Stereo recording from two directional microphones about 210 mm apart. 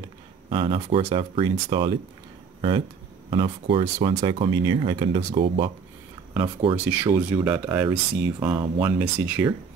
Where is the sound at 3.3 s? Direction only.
25° right (ahead or behind).